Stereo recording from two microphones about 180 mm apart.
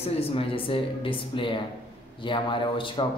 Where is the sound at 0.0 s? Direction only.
30° left (ahead or behind).